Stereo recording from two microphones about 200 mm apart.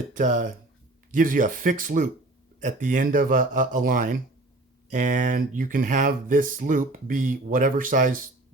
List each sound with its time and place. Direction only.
0.1 s speech: 40° right (ahead or behind)